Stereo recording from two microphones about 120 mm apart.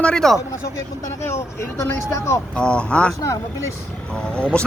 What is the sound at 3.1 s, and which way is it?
Speech, 30° left (ahead or behind).